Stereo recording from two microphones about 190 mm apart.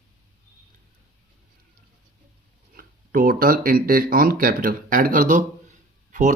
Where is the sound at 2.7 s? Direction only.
50° right (ahead or behind).